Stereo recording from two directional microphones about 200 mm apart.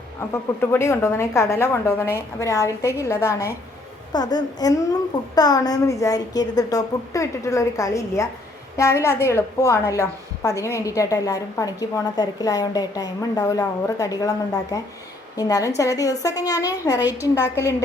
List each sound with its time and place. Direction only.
0.6 s a woman's voice: 15° left (ahead or behind)
17.0 s a woman's voice: 10° right (ahead or behind)
17.3 s a woman's voice: 15° left (ahead or behind)